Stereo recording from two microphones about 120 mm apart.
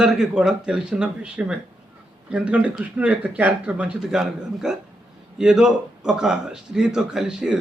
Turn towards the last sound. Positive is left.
turn(degrees=-10)  # may be behind; listen again after turning